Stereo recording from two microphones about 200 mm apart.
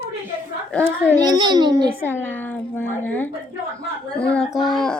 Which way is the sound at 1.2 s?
20° right (ahead or behind).